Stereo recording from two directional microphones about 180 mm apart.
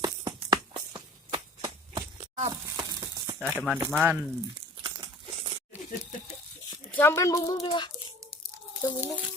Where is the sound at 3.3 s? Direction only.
5° right (ahead or behind).